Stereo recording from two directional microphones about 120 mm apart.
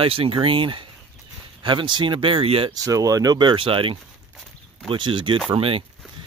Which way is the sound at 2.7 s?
30° right (ahead or behind).